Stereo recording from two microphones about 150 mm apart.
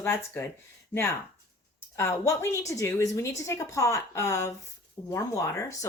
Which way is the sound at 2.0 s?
20° left (ahead or behind).